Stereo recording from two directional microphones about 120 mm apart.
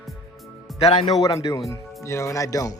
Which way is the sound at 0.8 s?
55° left (ahead or behind).